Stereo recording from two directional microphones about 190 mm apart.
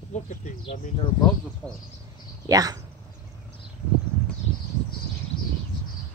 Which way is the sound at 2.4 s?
20° right (ahead or behind).